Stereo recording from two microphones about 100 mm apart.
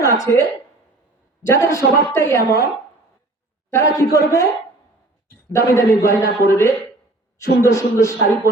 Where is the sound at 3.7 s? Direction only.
30° left (ahead or behind).